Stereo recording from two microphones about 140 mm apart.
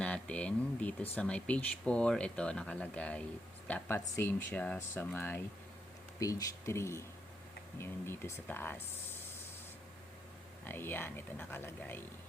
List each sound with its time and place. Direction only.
0.0 s a sound: 10° left (ahead or behind)
1.1 s speech: 10° left (ahead or behind)
10.6 s speech: 15° left (ahead or behind)